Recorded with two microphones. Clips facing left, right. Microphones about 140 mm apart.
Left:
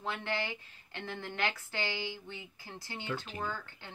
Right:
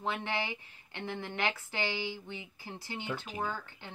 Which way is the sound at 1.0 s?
20° right (ahead or behind).